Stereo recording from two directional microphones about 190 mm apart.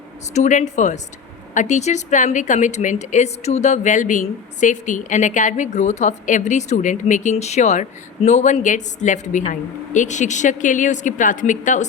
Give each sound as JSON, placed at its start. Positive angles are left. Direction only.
{"t": 0.3, "sound": "a woman's voice", "side_deg": 40}